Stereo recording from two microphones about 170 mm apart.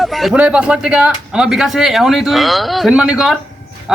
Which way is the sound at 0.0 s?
Centre (ahead or behind).